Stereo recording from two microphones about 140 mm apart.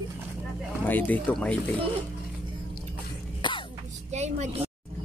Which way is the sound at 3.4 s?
35° left (ahead or behind).